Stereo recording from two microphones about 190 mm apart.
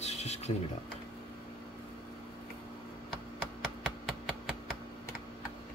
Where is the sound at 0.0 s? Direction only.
35° left (ahead or behind).